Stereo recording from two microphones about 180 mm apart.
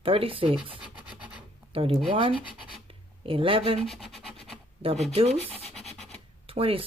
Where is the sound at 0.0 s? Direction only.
30° right (ahead or behind).